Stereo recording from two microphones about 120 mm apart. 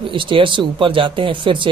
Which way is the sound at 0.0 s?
45° right (ahead or behind).